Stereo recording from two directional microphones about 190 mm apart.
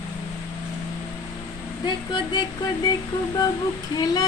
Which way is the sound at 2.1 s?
25° left (ahead or behind).